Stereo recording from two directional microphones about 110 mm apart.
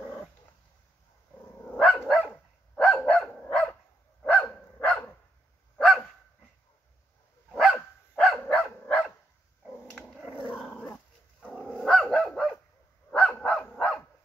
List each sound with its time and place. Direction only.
1.6 s dog: 10° left (ahead or behind)
2.8 s dog: 10° left (ahead or behind)
7.4 s dog: centre (ahead or behind)
10.2 s dog: 15° right (ahead or behind)
10.5 s dog: 10° left (ahead or behind)
11.6 s dog: 5° right (ahead or behind)
13.1 s dog: 10° left (ahead or behind)